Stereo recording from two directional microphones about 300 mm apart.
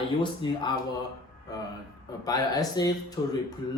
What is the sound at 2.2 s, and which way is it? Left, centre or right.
Speech, centre.